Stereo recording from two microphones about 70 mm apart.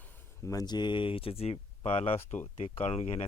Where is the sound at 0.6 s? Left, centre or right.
Left.